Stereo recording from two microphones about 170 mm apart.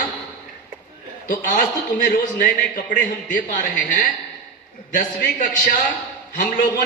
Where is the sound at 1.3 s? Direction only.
55° left (ahead or behind).